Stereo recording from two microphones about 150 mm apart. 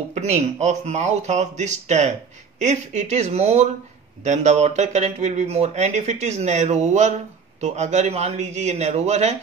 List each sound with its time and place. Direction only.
0.1 s speech: 50° right (ahead or behind)